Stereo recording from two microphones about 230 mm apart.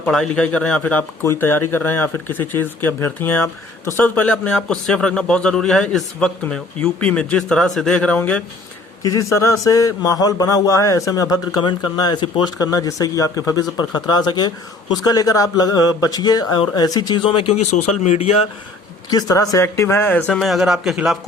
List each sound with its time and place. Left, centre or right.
0.0 s speech: centre; by 18.3 s left
19.1 s speech: centre